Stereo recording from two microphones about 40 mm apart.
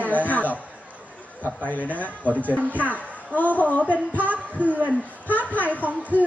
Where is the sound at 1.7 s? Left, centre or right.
Left.